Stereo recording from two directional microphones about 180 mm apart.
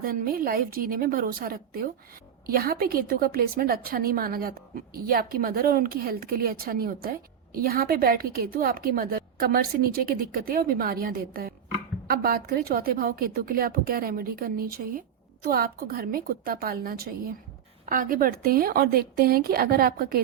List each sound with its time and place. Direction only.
0.0 s a woman's voice: 55° right (ahead or behind)